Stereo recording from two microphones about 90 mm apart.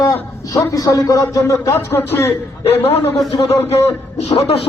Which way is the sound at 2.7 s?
90° left.